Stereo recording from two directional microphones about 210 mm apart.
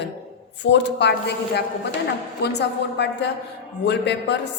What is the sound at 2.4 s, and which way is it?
A woman's voice, 55° left (ahead or behind).